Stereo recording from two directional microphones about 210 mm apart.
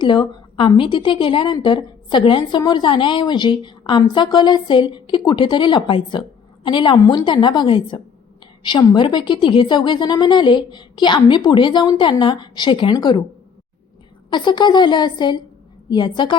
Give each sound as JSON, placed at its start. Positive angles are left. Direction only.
{"t": 0.0, "sound": "a woman's voice", "side_deg": 20}
{"t": 14.3, "sound": "a woman's voice", "side_deg": 20}